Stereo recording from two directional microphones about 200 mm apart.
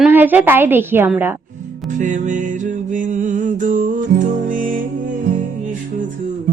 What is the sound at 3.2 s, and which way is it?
Music, 40° right (ahead or behind).